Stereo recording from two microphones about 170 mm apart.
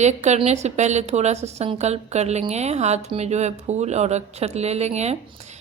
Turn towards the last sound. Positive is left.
turn(degrees=-40)  # may be behind; listen again after turning